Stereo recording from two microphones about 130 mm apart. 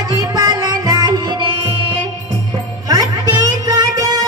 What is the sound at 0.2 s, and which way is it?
Music, 30° right (ahead or behind).